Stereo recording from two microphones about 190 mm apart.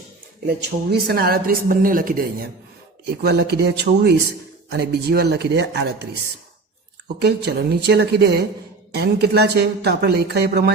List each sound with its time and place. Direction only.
0.4 s speech: 60° right (ahead or behind)
3.1 s speech: 60° right (ahead or behind)
7.2 s speech: 60° right (ahead or behind)